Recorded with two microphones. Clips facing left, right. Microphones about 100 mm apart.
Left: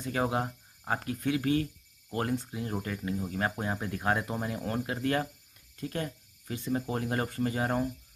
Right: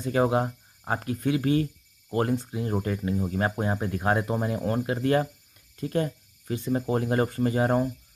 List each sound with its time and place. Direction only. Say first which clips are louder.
0.0 s speech: right 6 dB; 25° right (ahead or behind)